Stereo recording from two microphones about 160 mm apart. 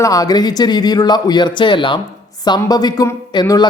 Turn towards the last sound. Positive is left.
turn(degrees=25)  # may be behind; listen again after turning